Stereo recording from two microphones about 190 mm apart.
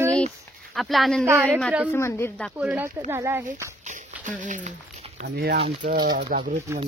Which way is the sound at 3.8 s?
40° right (ahead or behind).